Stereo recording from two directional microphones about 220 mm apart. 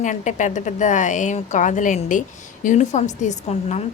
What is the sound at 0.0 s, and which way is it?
A woman's voice, 35° left (ahead or behind).